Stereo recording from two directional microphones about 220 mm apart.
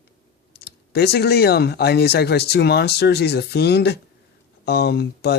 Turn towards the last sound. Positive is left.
turn(degrees=45)  # may be behind; listen again after turning